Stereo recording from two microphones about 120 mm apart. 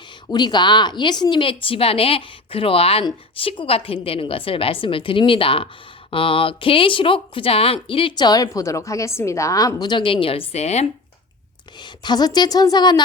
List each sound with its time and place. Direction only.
0.3 s a woman's voice: 35° left (ahead or behind); by 10.8 s 65° left (ahead or behind)
11.8 s speech: 40° left (ahead or behind)